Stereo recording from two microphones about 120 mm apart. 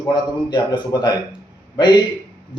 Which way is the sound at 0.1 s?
35° left (ahead or behind).